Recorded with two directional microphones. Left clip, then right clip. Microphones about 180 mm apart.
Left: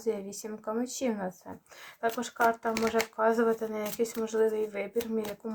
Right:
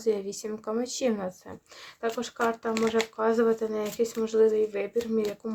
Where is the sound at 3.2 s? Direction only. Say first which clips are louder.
Right 2 dB; 45° right (ahead or behind).